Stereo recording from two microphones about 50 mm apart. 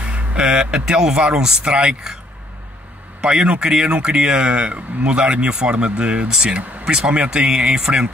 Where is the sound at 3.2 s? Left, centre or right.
Centre.